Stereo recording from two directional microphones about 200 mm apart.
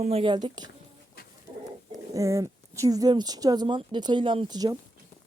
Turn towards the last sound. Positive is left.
turn(degrees=-20)  # may be behind; listen again after turning